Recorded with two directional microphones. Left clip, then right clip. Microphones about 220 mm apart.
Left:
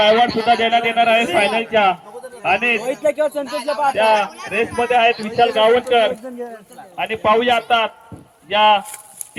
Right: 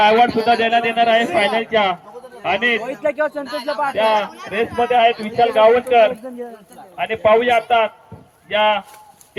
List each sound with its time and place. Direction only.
0.0 s speech: 10° left (ahead or behind)
0.3 s speech: 20° left (ahead or behind); by 3.4 s 45° left (ahead or behind)
3.4 s speech: 40° right (ahead or behind)
3.8 s speech: 35° left (ahead or behind)